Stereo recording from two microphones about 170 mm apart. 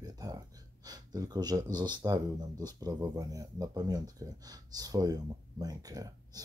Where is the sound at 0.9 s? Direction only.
25° right (ahead or behind).